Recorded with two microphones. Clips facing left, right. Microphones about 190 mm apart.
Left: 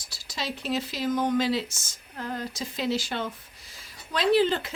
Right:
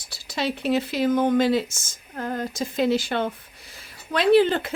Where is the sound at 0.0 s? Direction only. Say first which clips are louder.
Right 8 dB; 60° right (ahead or behind).